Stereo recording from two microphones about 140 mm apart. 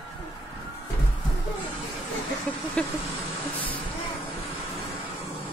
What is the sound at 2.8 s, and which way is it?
Vehicle, 5° left (ahead or behind).